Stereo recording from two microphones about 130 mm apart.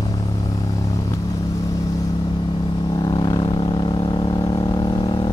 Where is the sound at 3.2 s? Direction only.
35° left (ahead or behind).